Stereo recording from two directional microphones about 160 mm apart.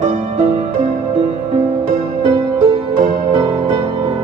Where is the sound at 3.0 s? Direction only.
50° right (ahead or behind).